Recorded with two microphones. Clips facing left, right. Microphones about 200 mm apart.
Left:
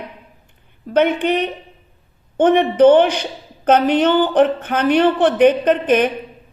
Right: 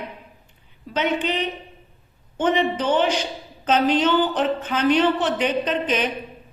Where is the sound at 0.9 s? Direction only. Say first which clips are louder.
Left 8 dB; 55° left (ahead or behind).